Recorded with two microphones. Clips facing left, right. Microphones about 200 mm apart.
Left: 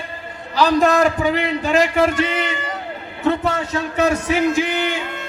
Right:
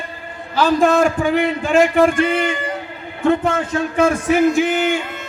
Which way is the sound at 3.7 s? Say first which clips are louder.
Right 2 dB; 50° right (ahead or behind).